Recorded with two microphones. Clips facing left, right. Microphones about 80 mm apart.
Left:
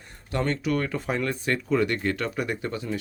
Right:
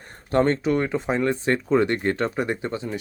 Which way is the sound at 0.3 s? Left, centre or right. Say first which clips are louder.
Right 6 dB; right.